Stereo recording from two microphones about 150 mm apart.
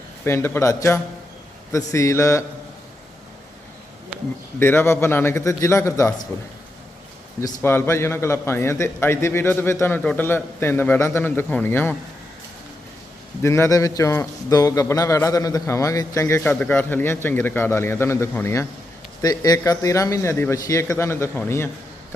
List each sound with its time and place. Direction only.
0.3 s a man's voice: 15° left (ahead or behind)
4.6 s a man's voice: 15° left (ahead or behind)
7.6 s a man's voice: 15° left (ahead or behind)
13.4 s a man's voice: 20° left (ahead or behind)